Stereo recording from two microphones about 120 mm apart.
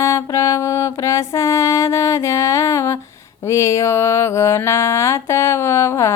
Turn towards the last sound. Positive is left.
turn(degrees=20)  # may be behind; listen again after turning